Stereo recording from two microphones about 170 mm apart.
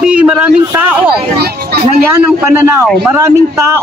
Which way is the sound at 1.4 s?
65° right (ahead or behind).